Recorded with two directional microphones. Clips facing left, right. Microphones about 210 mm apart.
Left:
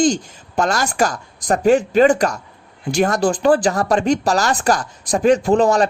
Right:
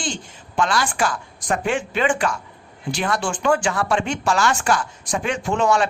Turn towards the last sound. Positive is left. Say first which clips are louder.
# left 6 dB
turn(degrees=35)  # may be behind; listen again after turning